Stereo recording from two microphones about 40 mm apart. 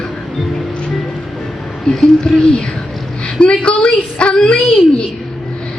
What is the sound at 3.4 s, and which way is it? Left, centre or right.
A woman's voice, left.